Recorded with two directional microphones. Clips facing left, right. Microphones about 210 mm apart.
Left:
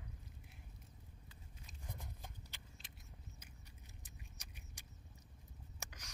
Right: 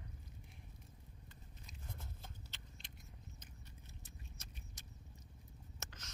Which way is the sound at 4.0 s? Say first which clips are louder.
Right 2 dB; 15° left (ahead or behind).